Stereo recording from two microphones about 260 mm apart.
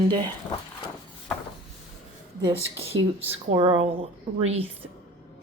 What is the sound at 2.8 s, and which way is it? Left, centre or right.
A woman's voice, right.